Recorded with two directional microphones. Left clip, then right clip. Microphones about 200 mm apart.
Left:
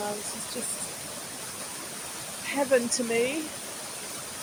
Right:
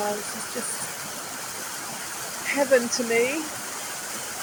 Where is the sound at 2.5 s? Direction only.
15° left (ahead or behind).